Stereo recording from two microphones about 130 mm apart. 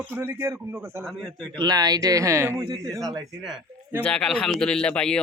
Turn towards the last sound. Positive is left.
turn(degrees=5)  # may be behind; listen again after turning